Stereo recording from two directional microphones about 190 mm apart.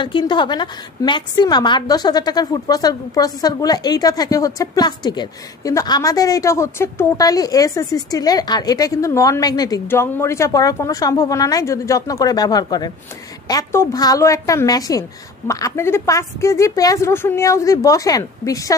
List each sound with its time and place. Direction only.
0.0 s a woman's voice: 25° left (ahead or behind)